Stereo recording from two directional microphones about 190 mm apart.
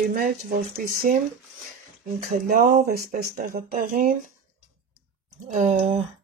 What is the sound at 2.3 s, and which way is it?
Speech, 50° right (ahead or behind).